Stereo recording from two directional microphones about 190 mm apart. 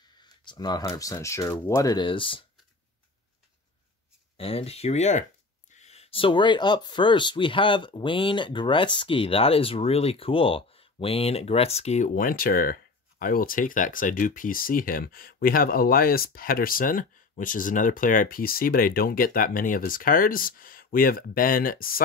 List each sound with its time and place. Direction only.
0.2 s speech: 20° left (ahead or behind)
4.4 s speech: 30° left (ahead or behind); by 22.0 s 50° left (ahead or behind)